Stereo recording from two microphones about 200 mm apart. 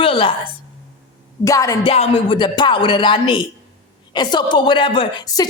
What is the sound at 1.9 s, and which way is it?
A woman's voice, 30° left (ahead or behind).